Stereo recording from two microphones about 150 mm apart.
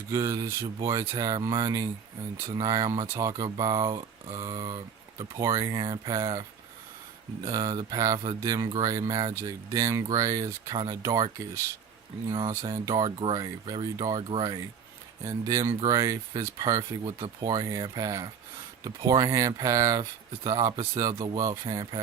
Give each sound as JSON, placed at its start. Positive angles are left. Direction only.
{"t": 0.1, "sound": "speech", "side_deg": -20}
{"t": 7.4, "sound": "speech", "side_deg": -25}
{"t": 15.2, "sound": "speech", "side_deg": -25}